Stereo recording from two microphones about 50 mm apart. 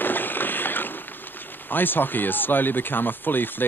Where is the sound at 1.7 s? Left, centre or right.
Left.